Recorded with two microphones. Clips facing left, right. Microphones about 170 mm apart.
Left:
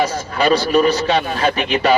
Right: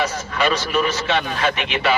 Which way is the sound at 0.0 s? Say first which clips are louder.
Left 4 dB; 35° left (ahead or behind).